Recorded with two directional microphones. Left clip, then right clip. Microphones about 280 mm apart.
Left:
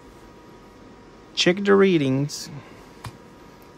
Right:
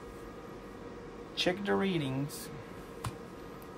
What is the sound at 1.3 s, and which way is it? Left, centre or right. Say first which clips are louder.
Speech: left 13 dB; left.